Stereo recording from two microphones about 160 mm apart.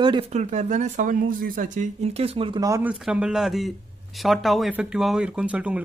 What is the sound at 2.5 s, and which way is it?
Speech, 20° right (ahead or behind).